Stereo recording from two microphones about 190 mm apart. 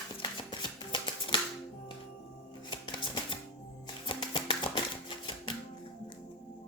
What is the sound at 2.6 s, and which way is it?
Shuffling cards, 25° left (ahead or behind).